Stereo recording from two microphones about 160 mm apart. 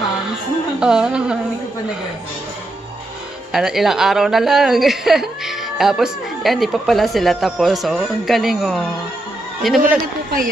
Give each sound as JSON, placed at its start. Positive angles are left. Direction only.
{"t": 0.3, "sound": "music", "side_deg": -5}
{"t": 3.5, "sound": "speech", "side_deg": 0}
{"t": 9.8, "sound": "a man's voice", "side_deg": -60}